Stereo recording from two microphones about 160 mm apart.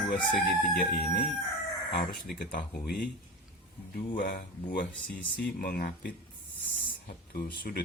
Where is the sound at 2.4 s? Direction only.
80° left.